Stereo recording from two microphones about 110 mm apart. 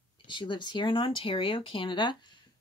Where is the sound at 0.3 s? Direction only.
45° left (ahead or behind).